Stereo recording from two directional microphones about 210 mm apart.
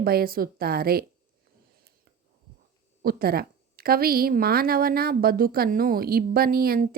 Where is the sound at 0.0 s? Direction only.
45° right (ahead or behind).